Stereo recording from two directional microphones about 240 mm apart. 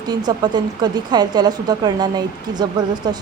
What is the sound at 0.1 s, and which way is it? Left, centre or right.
Speech, centre.